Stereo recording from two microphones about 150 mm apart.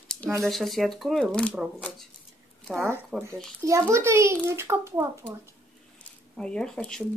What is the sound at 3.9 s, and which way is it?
Speech, 20° right (ahead or behind).